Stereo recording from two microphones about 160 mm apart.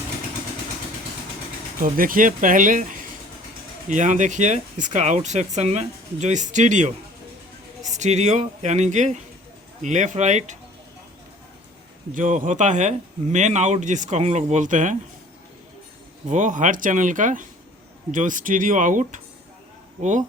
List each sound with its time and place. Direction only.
1.8 s speech: 60° right (ahead or behind)
12.1 s speech: 55° right (ahead or behind)
16.3 s speech: 50° right (ahead or behind)